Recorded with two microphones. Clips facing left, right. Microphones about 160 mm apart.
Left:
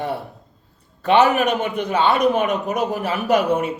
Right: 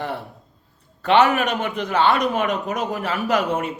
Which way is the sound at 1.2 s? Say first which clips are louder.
Left 2 dB; 25° left (ahead or behind).